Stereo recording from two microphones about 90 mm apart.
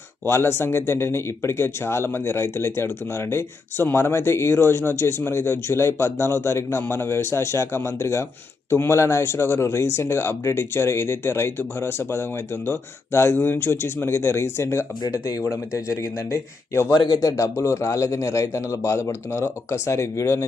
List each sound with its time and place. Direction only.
0.3 s a man's voice: 30° left (ahead or behind)
15.0 s speech: 40° left (ahead or behind)
16.9 s speech: 55° left (ahead or behind)
17.2 s speech: 40° left (ahead or behind)